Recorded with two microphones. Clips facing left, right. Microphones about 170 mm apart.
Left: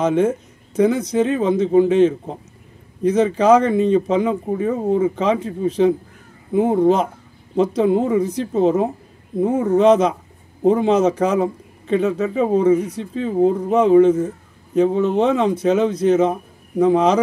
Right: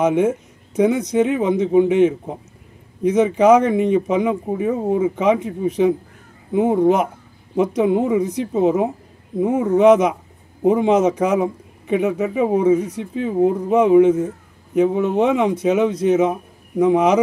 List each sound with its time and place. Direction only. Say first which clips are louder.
0.0 s a man's voice: even; 15° right (ahead or behind)